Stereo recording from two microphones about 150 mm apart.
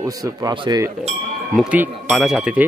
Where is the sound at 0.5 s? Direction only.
35° right (ahead or behind).